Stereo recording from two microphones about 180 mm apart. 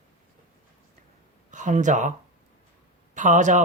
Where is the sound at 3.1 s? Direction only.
45° right (ahead or behind).